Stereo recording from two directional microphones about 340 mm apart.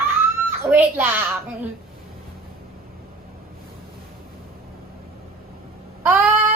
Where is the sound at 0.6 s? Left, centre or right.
Centre.